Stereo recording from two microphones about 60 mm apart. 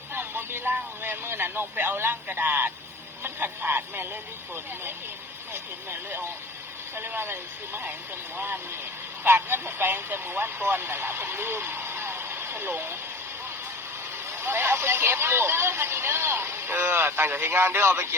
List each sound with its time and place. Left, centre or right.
0.1 s speech: right
5.9 s speech: right
9.2 s speech: right
14.4 s speech: right